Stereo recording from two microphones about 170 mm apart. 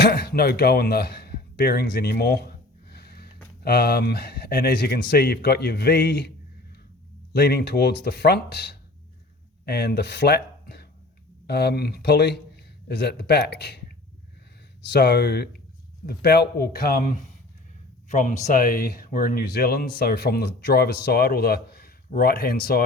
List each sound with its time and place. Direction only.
0.0 s speech: 80° left
7.3 s speech: 75° left (ahead or behind)
18.1 s speech: 45° left (ahead or behind); by 22.8 s 65° left (ahead or behind)